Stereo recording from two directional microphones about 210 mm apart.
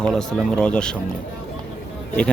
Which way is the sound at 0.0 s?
5° left (ahead or behind).